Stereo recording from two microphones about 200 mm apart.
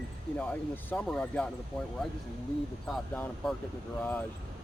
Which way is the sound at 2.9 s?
Centre (ahead or behind).